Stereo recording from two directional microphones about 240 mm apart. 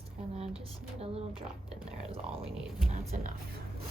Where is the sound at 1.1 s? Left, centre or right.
Right.